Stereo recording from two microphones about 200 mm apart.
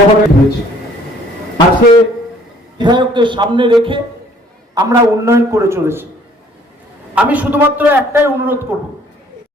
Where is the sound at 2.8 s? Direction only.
20° right (ahead or behind).